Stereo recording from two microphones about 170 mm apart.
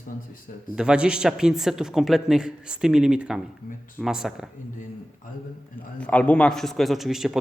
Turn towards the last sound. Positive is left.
turn(degrees=0)  # may be behind; listen again after turning